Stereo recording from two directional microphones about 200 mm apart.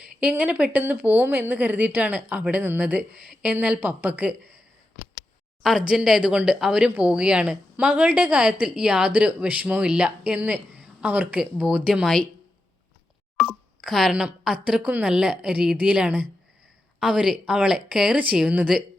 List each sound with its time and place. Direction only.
0.2 s speech: 5° right (ahead or behind)
5.6 s speech: 5° right (ahead or behind)
13.3 s speech: centre (ahead or behind)